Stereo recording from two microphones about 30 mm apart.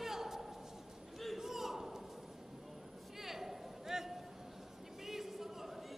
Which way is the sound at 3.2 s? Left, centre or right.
Centre.